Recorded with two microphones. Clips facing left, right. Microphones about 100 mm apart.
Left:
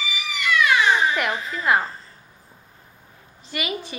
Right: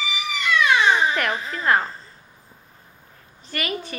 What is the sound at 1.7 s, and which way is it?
Speech, 10° left (ahead or behind).